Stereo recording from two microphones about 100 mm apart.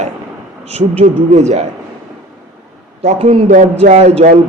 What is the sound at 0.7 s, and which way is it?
Speech, 90° right.